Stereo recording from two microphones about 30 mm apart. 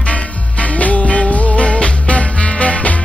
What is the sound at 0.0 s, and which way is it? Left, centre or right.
Music, left.